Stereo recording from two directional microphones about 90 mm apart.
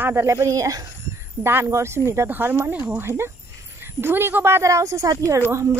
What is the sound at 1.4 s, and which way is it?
Speech, 30° right (ahead or behind).